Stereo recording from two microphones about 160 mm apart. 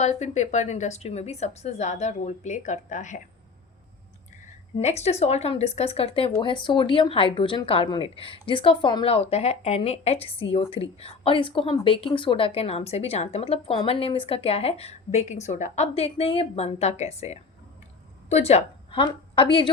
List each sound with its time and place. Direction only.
0.0 s a woman's voice: 45° left (ahead or behind)
4.8 s a woman's voice: 40° left (ahead or behind)